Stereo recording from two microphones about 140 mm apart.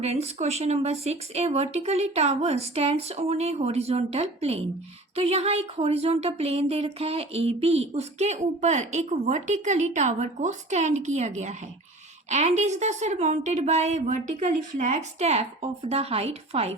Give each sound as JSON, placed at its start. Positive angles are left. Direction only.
{"t": 0.0, "sound": "a woman's voice", "side_deg": -50}